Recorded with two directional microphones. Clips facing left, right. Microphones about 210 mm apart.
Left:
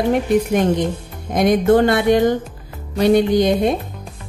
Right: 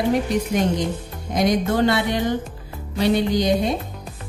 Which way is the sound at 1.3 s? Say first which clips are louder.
Left 6 dB; 55° left (ahead or behind).